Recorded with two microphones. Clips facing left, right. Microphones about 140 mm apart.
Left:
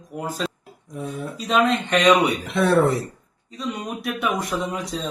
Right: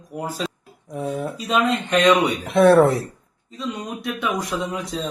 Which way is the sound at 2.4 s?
55° right (ahead or behind).